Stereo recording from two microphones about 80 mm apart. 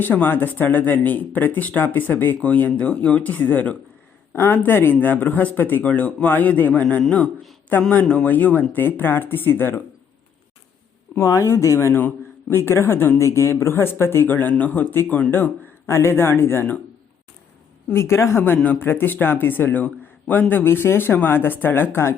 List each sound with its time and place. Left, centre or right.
0.0 s speech: left
11.2 s speech: left
11.9 s a man's voice: left
17.9 s speech: left